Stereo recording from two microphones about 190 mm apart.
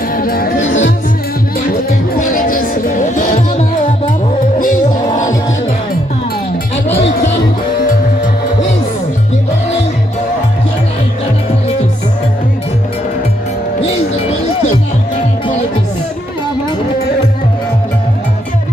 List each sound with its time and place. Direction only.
0.1 s music: 50° left (ahead or behind)
0.6 s music: 90° left
1.7 s music: 45° left (ahead or behind)
4.6 s music: 45° left (ahead or behind)
7.9 s music: 40° left (ahead or behind)